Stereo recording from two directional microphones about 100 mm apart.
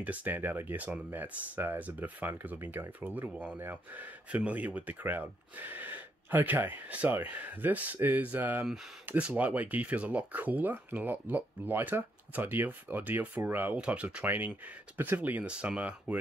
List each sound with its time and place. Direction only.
0.0 s speech: 15° right (ahead or behind)